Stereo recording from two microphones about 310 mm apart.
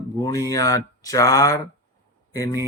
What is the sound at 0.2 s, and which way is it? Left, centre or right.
Speech, centre.